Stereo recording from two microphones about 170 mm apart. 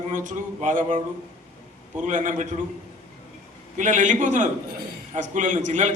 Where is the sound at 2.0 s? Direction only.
45° right (ahead or behind).